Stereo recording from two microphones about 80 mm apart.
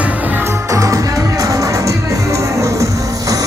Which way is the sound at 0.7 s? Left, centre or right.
Right.